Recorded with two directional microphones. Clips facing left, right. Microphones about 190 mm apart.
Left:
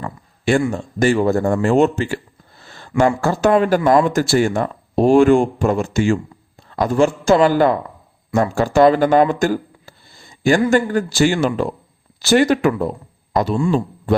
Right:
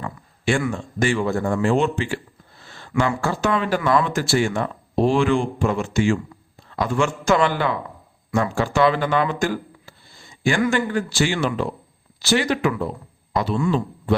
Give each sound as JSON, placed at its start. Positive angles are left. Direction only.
{"t": 0.0, "sound": "speech", "side_deg": 40}
{"t": 2.7, "sound": "a sound", "side_deg": 40}
{"t": 3.2, "sound": "a man's voice", "side_deg": 40}